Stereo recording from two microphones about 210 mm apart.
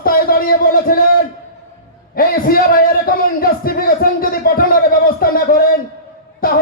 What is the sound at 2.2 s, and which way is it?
A man's voice, 45° left (ahead or behind).